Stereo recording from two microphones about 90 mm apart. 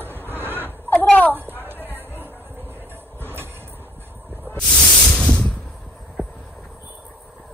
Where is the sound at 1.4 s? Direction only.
25° right (ahead or behind).